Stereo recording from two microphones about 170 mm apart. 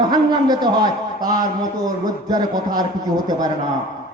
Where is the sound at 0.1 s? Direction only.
25° right (ahead or behind).